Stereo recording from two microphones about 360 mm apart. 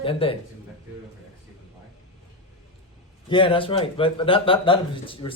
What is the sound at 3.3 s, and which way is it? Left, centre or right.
Speech, centre.